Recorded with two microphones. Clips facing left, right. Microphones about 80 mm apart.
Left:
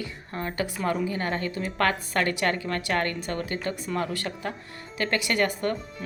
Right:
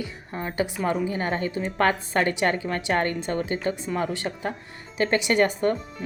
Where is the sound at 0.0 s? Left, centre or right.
Centre.